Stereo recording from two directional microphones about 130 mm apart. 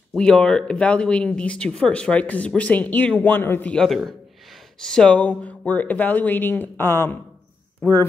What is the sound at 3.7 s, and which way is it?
A man's voice, centre (ahead or behind).